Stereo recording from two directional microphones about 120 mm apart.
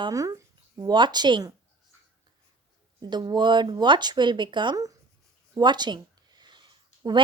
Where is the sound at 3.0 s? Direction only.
35° right (ahead or behind).